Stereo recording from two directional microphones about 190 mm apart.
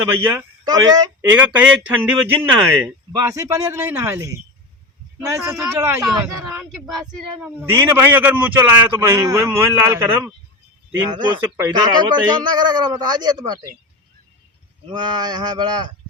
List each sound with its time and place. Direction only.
0.1 s a man's voice: 10° right (ahead or behind)
0.6 s speech: 20° right (ahead or behind)
1.4 s a man's voice: 5° right (ahead or behind)
5.5 s a man's voice: 15° right (ahead or behind)
6.7 s speech: centre (ahead or behind)
7.4 s a man's voice: 10° right (ahead or behind)
14.9 s a man's voice: 20° right (ahead or behind)